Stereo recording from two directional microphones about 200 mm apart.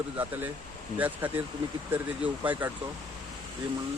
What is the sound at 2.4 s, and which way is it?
Speech, 10° right (ahead or behind).